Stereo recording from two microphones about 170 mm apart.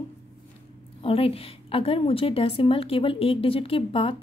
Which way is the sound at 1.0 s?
35° left (ahead or behind).